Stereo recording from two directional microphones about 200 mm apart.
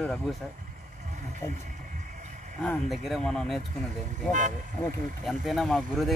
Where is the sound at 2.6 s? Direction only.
Centre (ahead or behind).